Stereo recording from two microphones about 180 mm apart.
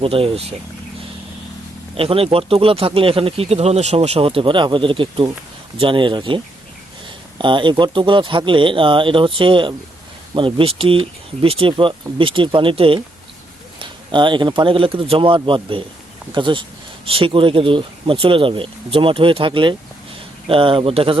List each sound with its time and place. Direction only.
0.0 s speech: 30° right (ahead or behind)
2.0 s speech: 30° right (ahead or behind)